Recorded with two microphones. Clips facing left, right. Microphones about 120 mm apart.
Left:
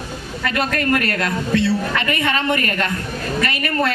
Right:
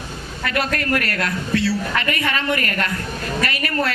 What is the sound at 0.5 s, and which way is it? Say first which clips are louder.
Speech: left 2 dB; 25° left (ahead or behind).